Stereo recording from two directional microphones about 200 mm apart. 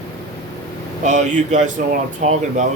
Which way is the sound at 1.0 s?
35° right (ahead or behind).